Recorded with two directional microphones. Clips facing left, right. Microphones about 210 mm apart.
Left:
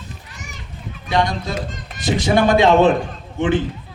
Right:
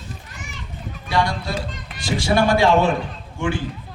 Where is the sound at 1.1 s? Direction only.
20° left (ahead or behind).